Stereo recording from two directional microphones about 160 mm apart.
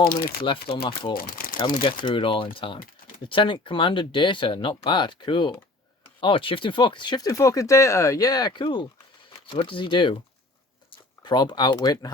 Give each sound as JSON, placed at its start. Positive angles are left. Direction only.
{"t": 0.0, "sound": "speech", "side_deg": 65}
{"t": 0.4, "sound": "speech", "side_deg": 35}
{"t": 1.1, "sound": "speech", "side_deg": 65}
{"t": 1.5, "sound": "speech", "side_deg": 30}
{"t": 11.2, "sound": "speech", "side_deg": 25}